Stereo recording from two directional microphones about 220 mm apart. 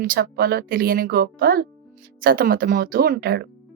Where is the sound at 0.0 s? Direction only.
40° right (ahead or behind).